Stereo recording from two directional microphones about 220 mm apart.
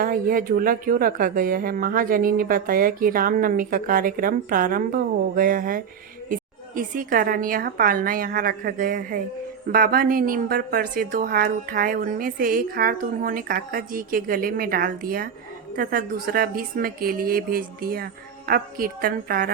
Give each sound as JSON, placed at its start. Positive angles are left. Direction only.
{"t": 0.0, "sound": "a woman's voice", "side_deg": -40}